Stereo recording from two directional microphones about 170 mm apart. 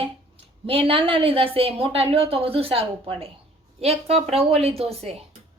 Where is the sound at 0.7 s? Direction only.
35° right (ahead or behind).